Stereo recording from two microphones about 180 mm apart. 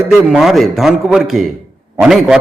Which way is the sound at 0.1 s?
Centre (ahead or behind).